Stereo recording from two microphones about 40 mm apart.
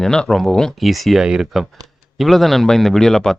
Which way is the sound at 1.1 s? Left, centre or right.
Centre.